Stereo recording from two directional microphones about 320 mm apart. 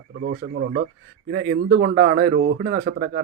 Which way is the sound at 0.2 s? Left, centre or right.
Right.